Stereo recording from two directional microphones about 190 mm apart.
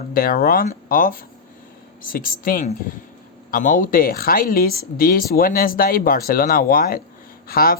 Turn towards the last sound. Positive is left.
turn(degrees=50)  # may be behind; listen again after turning